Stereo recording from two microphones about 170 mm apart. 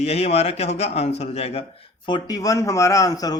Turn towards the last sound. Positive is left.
turn(degrees=20)  # may be behind; listen again after turning